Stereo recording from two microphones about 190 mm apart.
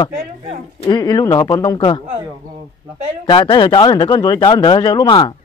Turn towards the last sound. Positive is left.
turn(degrees=25)  # may be behind; listen again after turning